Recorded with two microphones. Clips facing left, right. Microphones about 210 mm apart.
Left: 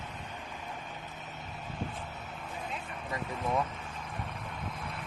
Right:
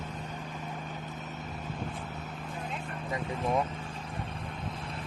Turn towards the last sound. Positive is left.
turn(degrees=-30)  # may be behind; listen again after turning